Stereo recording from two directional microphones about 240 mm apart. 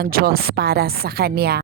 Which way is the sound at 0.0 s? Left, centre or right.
Right.